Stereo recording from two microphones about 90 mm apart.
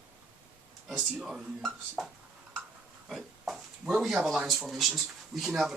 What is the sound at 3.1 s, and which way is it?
Speech, centre (ahead or behind).